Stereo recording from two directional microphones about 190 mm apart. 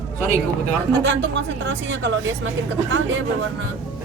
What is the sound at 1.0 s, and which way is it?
Speech, 70° right (ahead or behind).